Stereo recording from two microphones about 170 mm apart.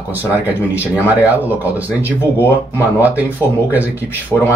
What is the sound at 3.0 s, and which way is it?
Speech, 10° right (ahead or behind).